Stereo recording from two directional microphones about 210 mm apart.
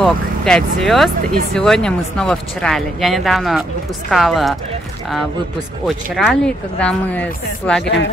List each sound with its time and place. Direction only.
0.0 s speech: 5° left (ahead or behind)
5.9 s speech: centre (ahead or behind)
7.8 s speech: 60° left (ahead or behind)